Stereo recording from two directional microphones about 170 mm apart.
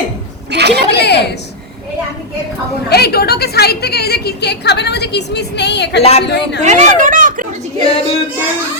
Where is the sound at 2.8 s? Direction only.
70° left (ahead or behind).